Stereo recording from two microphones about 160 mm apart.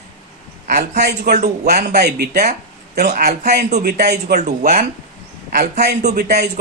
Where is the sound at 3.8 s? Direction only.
90° right.